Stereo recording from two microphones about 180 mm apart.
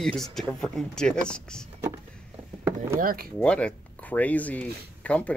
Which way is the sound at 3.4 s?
5° left (ahead or behind).